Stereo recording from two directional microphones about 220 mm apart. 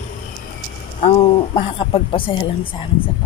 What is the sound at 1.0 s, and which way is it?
A woman's voice, 25° left (ahead or behind).